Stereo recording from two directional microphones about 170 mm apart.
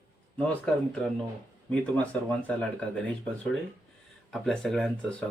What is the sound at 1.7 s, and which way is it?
Speech, 10° left (ahead or behind).